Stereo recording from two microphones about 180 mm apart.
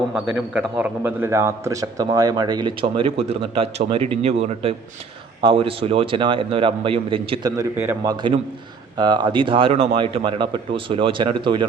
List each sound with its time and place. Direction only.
0.3 s a man's voice: 10° right (ahead or behind); by 7.5 s 30° right (ahead or behind)
7.5 s a man's voice: 15° right (ahead or behind)